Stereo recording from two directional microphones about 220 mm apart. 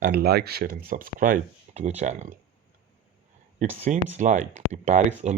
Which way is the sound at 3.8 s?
35° right (ahead or behind).